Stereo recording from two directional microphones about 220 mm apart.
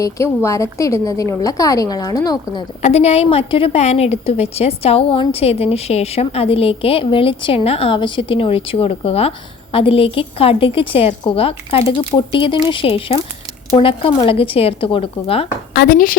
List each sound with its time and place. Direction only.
0.0 s a woman's voice: 15° left (ahead or behind)
2.8 s a woman's voice: 30° left (ahead or behind)
15.7 s speech: 45° left (ahead or behind)